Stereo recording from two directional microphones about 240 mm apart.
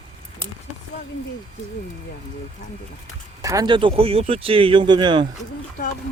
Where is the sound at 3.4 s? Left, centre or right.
Centre.